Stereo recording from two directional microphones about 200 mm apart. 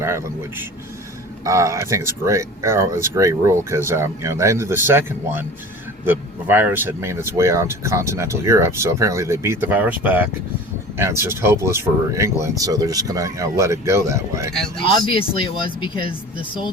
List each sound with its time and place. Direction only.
1.5 s speech: 15° right (ahead or behind)
14.8 s speech: 25° left (ahead or behind)